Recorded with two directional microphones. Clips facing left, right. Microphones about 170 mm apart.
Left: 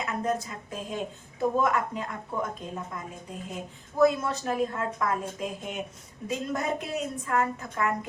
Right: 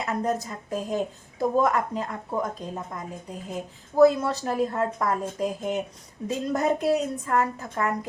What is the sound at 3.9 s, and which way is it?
A woman's voice, 35° right (ahead or behind).